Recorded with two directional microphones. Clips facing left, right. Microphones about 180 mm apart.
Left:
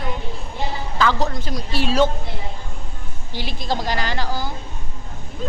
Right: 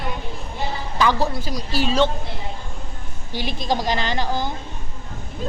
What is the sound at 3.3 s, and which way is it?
A woman's voice, 20° right (ahead or behind).